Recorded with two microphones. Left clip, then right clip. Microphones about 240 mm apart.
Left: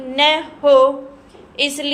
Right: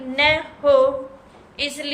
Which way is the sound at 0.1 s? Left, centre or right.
Left.